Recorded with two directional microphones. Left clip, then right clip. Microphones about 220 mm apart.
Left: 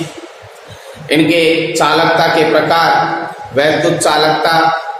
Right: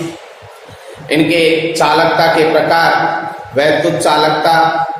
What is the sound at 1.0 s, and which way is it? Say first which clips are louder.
A man's voice: left 1 dB; 10° left (ahead or behind).